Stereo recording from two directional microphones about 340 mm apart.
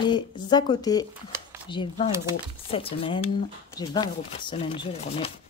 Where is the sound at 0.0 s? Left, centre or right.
Centre.